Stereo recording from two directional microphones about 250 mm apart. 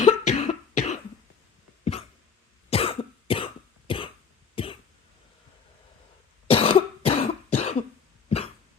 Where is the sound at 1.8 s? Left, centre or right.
Left.